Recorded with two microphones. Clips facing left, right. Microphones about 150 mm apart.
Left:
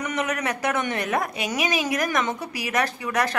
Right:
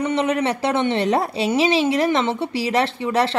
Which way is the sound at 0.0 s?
30° right (ahead or behind).